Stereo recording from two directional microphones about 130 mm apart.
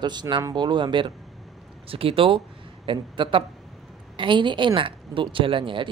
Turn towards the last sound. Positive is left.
turn(degrees=-40)  # may be behind; listen again after turning